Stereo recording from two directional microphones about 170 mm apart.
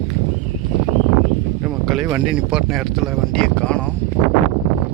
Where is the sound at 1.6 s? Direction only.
Centre (ahead or behind).